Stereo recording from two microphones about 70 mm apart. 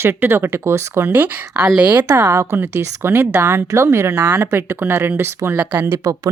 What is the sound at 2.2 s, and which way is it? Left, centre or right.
Speech, right.